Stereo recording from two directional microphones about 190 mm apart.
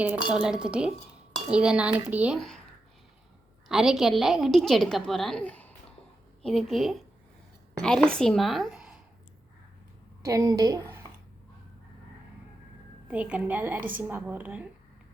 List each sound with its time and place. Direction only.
0.3 s a woman's voice: 5° right (ahead or behind)
3.7 s a woman's voice: centre (ahead or behind)
10.2 s a woman's voice: 20° right (ahead or behind)
13.1 s a woman's voice: 5° right (ahead or behind)